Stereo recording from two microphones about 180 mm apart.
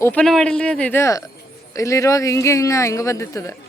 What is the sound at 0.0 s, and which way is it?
Speech, 5° left (ahead or behind).